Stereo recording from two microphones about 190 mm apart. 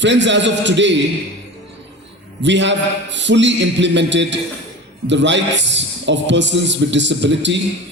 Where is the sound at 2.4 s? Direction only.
70° right (ahead or behind).